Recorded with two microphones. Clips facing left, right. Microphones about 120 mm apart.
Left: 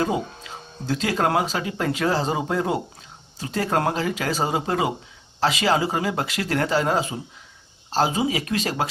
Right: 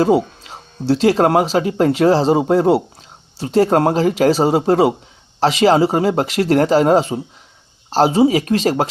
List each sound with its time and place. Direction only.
0.9 s speech: 35° right (ahead or behind)